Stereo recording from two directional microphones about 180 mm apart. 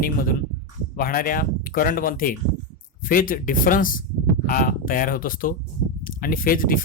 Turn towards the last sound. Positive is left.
turn(degrees=50)  # may be behind; listen again after turning